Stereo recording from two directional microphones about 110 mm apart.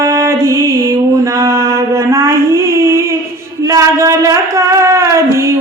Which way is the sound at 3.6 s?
30° right (ahead or behind).